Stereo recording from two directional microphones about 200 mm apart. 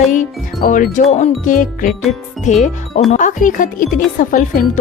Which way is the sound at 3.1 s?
40° left (ahead or behind).